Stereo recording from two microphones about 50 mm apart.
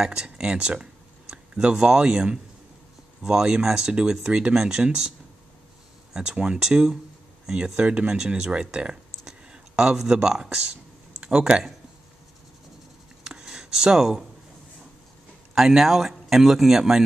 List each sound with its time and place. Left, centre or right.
0.0 s speech: centre
6.1 s speech: centre
13.2 s a sound: centre
15.5 s speech: centre